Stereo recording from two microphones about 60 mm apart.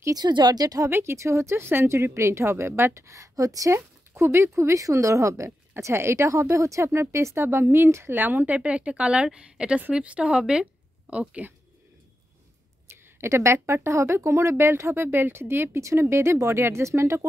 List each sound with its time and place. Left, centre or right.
0.0 s speech: right
0.8 s speech: right
3.7 s speech: right
7.4 s speech: right
8.2 s a woman's voice: right
12.9 s speech: right